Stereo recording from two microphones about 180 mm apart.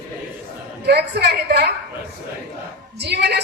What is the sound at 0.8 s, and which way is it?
Speech, 65° right (ahead or behind).